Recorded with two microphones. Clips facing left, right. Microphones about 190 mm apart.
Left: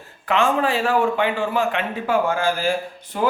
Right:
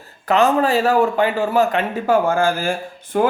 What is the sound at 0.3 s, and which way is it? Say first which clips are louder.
A man's voice: right 4 dB; 40° right (ahead or behind).